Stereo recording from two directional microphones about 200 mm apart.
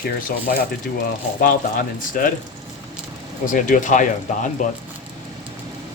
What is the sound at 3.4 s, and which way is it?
Speech, 40° left (ahead or behind).